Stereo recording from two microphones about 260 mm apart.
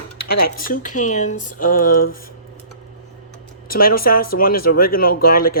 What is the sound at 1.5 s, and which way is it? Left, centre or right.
Cutlery, left.